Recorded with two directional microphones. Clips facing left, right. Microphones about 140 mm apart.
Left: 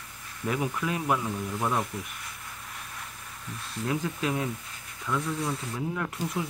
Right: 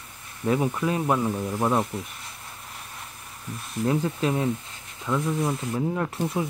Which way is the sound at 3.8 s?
30° right (ahead or behind).